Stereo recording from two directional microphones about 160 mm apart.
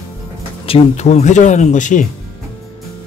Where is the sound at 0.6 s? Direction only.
40° left (ahead or behind).